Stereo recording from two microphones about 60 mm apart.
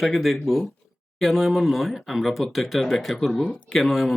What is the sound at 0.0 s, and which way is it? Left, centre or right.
Speech, centre.